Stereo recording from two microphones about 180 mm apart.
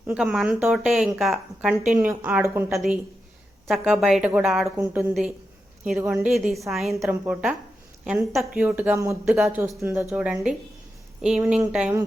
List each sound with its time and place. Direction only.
0.1 s a woman's voice: centre (ahead or behind)
2.7 s a woman's voice: centre (ahead or behind)
11.2 s a woman's voice: 5° right (ahead or behind)